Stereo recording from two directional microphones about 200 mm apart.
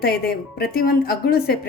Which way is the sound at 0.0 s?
50° left (ahead or behind).